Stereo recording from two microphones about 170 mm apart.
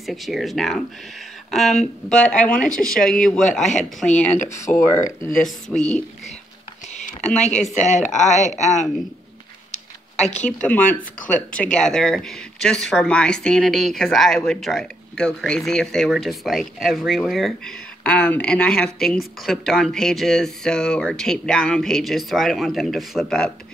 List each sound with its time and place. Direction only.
0.0 s speech: centre (ahead or behind)
7.2 s speech: 5° left (ahead or behind)
7.9 s speech: 45° left (ahead or behind)
10.6 s speech: 10° left (ahead or behind)